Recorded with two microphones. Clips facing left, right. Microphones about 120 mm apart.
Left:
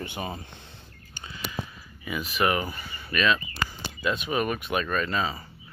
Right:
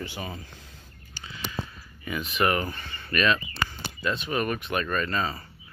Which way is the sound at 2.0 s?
5° left (ahead or behind).